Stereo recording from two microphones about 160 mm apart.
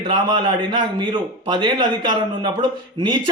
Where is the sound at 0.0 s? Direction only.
30° right (ahead or behind).